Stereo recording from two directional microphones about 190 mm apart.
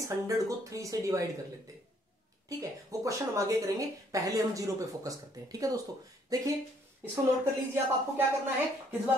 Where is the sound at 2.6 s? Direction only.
15° right (ahead or behind).